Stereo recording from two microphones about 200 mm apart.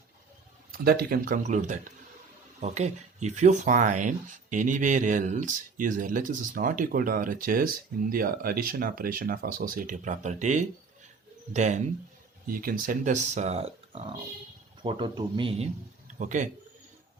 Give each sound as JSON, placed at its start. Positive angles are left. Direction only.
{"t": 0.7, "sound": "speech", "side_deg": -50}